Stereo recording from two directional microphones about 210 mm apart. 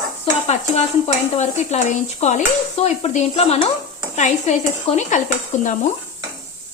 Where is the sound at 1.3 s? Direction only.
35° left (ahead or behind).